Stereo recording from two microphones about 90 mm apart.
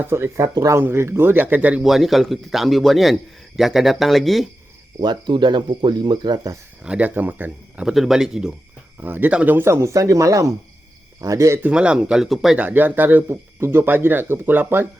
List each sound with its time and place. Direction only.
0.0 s speech: 25° right (ahead or behind)
0.8 s speech: 25° right (ahead or behind)
1.8 s a man's voice: 5° right (ahead or behind)
5.0 s speech: 60° right (ahead or behind)
6.8 s speech: 15° right (ahead or behind)
7.9 s a man's voice: 5° right (ahead or behind)
9.0 s speech: 20° right (ahead or behind)
11.6 s speech: 10° right (ahead or behind)
12.5 s speech: 20° right (ahead or behind)